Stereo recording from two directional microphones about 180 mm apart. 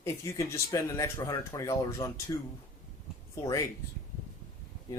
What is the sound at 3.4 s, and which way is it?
Speech, 15° left (ahead or behind).